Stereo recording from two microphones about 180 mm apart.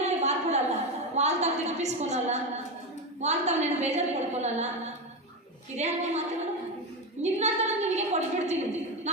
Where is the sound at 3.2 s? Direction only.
40° right (ahead or behind).